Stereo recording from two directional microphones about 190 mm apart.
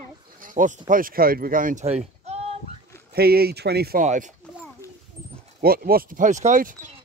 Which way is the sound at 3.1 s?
55° right (ahead or behind).